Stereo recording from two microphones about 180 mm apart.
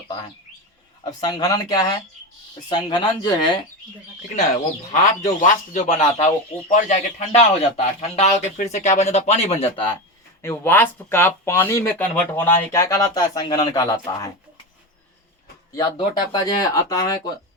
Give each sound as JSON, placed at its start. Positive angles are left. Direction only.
{"t": 1.2, "sound": "speech", "side_deg": 20}
{"t": 4.9, "sound": "a man's voice", "side_deg": 40}
{"t": 10.4, "sound": "speech", "side_deg": 15}
{"t": 15.7, "sound": "speech", "side_deg": 20}